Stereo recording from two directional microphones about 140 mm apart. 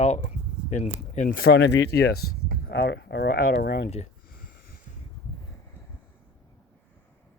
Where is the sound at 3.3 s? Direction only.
90° left.